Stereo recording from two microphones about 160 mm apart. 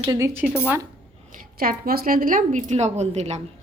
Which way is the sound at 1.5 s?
70° right (ahead or behind).